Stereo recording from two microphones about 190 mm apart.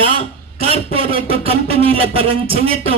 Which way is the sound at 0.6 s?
30° right (ahead or behind).